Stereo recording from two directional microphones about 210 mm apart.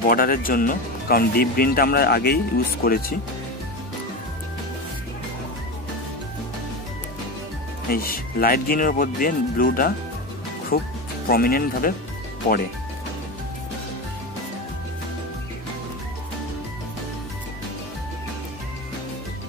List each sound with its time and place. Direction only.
0.1 s speech: 45° left (ahead or behind)
7.9 s speech: 45° left (ahead or behind)